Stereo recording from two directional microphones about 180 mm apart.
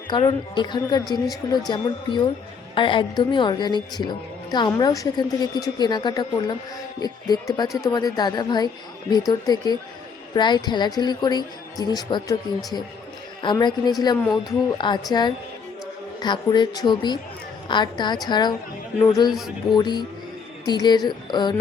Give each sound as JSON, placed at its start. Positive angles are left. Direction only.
{"t": 0.1, "sound": "a woman's voice", "side_deg": 25}
{"t": 13.4, "sound": "a woman's voice", "side_deg": 25}